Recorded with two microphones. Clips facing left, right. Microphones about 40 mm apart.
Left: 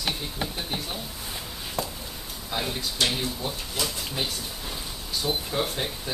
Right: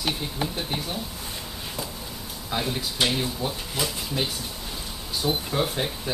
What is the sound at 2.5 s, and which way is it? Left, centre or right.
Speech, centre.